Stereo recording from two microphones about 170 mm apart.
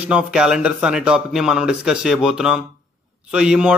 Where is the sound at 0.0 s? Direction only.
5° right (ahead or behind).